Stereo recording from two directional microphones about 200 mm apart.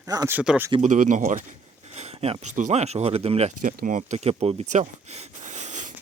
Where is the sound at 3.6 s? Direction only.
40° right (ahead or behind).